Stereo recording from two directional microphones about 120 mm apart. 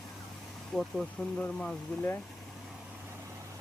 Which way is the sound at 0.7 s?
5° left (ahead or behind).